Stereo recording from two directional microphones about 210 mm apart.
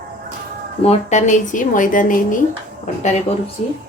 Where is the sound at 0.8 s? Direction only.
30° left (ahead or behind).